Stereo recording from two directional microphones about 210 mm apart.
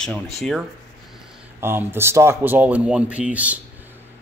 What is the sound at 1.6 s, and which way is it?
Speech, 10° right (ahead or behind).